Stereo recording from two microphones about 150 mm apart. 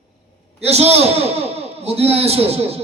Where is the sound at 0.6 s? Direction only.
45° right (ahead or behind).